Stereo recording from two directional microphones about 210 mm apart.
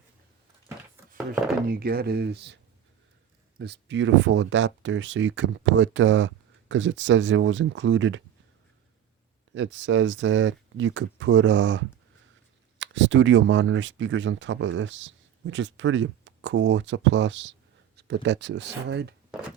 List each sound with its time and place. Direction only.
1.6 s speech: 45° right (ahead or behind)
3.6 s speech: 55° right (ahead or behind)
9.6 s speech: 60° right (ahead or behind)
19.3 s a sound: 5° right (ahead or behind)